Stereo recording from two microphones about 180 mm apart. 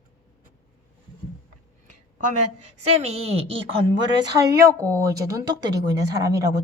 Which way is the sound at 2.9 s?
35° right (ahead or behind).